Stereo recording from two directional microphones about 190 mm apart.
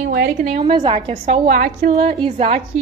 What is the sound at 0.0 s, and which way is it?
Speech, 55° right (ahead or behind).